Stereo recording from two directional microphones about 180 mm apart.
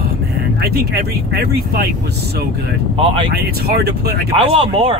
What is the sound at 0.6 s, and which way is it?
Speech, 60° right (ahead or behind).